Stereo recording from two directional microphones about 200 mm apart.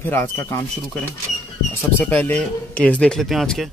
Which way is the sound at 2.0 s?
10° left (ahead or behind).